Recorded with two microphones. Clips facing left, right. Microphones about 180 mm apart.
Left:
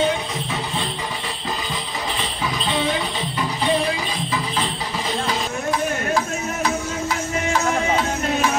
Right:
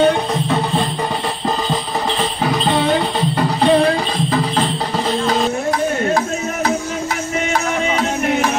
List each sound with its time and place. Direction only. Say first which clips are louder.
0.0 s music: right 7 dB; 60° right (ahead or behind)